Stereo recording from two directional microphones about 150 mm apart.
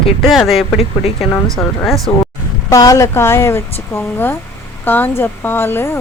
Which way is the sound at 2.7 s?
20° left (ahead or behind).